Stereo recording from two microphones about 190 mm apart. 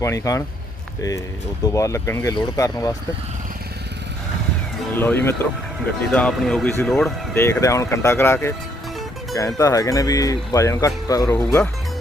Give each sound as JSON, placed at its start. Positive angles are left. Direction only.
{"t": 0.0, "sound": "speech", "side_deg": 15}
{"t": 1.6, "sound": "speech", "side_deg": 15}
{"t": 4.9, "sound": "speech", "side_deg": 10}
{"t": 7.3, "sound": "speech", "side_deg": 15}
{"t": 9.6, "sound": "speech", "side_deg": 15}